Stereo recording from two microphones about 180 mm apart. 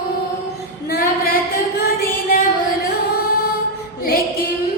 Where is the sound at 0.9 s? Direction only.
55° left (ahead or behind).